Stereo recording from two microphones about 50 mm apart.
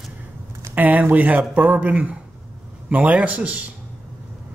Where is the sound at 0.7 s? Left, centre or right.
Right.